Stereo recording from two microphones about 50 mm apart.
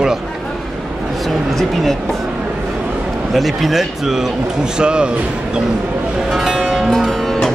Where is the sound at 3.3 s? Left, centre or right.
Centre.